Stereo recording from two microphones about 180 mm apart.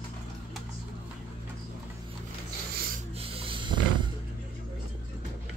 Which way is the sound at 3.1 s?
30° right (ahead or behind).